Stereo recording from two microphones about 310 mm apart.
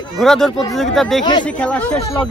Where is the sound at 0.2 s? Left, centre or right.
Centre.